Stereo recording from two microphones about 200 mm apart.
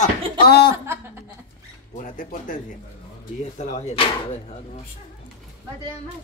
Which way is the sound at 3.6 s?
35° left (ahead or behind).